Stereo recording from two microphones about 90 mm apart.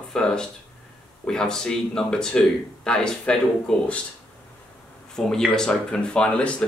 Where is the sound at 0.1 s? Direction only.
10° left (ahead or behind).